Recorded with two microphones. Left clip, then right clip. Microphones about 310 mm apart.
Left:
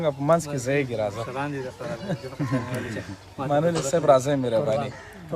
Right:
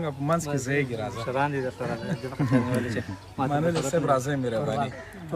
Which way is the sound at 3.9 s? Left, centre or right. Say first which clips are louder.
Left 8 dB; centre.